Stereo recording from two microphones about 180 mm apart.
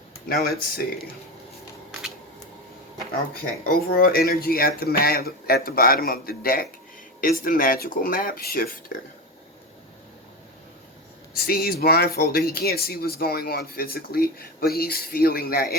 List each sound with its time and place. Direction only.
0.3 s speech: 55° left (ahead or behind)
3.7 s speech: 55° left (ahead or behind)
11.3 s speech: 60° left (ahead or behind)